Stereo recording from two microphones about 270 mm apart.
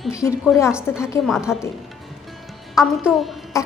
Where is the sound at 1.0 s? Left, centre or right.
Centre.